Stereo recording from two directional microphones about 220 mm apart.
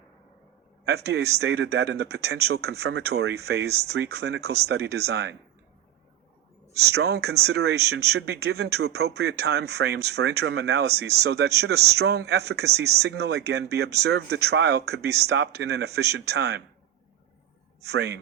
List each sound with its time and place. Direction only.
0.9 s speech: 50° right (ahead or behind)
6.7 s speech: 50° right (ahead or behind)
17.8 s speech: 50° right (ahead or behind)